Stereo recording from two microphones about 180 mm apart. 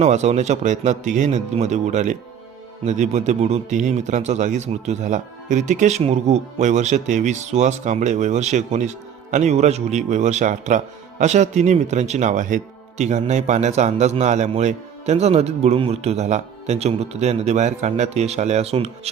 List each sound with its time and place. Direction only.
0.0 s a man's voice: 40° right (ahead or behind)